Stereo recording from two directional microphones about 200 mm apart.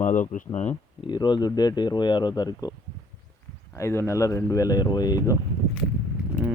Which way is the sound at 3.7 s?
15° left (ahead or behind).